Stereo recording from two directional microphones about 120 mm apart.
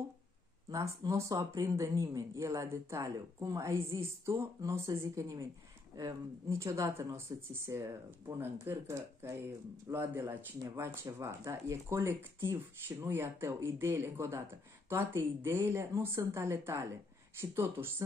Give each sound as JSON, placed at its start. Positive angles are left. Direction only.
{"t": 0.7, "sound": "speech", "side_deg": -30}